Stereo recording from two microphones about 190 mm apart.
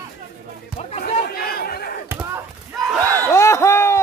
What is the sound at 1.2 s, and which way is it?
Chatter, 55° left (ahead or behind).